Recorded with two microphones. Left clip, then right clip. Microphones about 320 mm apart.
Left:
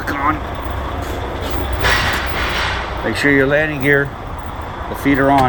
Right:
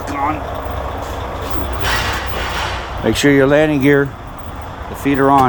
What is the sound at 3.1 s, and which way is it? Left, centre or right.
Speech, right.